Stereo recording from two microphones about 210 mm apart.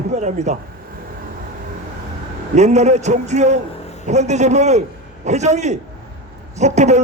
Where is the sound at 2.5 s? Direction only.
35° right (ahead or behind).